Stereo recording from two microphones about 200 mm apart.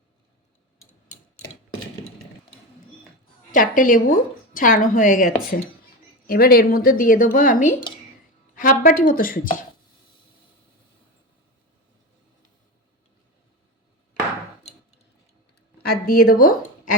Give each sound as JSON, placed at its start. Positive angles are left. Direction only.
{"t": 3.5, "sound": "a woman's voice", "side_deg": 40}
{"t": 16.0, "sound": "speech", "side_deg": 45}